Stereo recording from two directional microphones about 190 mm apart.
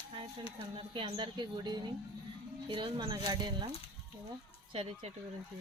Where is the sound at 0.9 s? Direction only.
25° right (ahead or behind).